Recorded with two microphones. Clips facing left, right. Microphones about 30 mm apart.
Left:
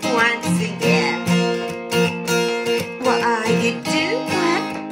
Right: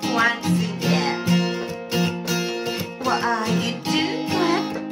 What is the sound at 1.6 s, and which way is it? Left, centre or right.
Music, left.